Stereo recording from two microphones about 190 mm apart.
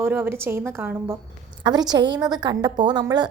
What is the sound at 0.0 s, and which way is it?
A woman's voice, 10° right (ahead or behind).